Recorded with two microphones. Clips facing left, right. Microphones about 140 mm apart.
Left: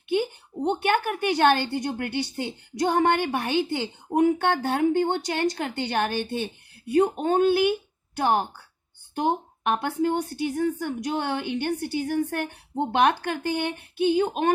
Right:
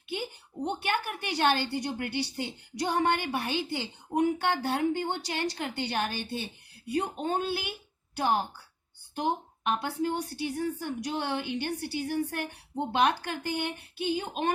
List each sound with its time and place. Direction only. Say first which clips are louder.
0.1 s a woman's voice: left 11 dB; 55° left (ahead or behind)